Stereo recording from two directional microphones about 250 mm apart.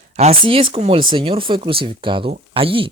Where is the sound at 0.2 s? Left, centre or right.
Right.